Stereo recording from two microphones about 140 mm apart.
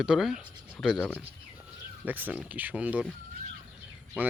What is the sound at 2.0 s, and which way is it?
Speech, 10° right (ahead or behind).